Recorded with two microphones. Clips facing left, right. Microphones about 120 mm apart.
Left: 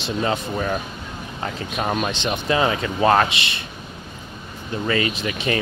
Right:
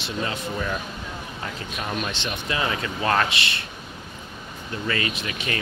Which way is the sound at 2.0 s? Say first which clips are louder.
Left 6 dB; 30° left (ahead or behind).